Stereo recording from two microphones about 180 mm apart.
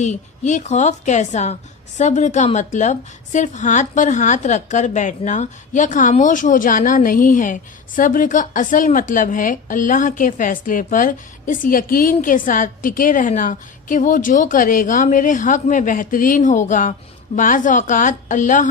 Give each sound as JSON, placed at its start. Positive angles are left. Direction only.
{"t": 0.0, "sound": "a woman's voice", "side_deg": 40}